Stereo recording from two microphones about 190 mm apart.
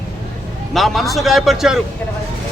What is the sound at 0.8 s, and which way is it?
Speech, centre (ahead or behind).